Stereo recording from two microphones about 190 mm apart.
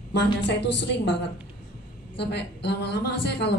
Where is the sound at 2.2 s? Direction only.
65° left (ahead or behind).